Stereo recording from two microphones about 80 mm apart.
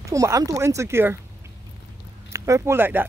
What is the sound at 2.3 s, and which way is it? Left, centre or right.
Speech, right.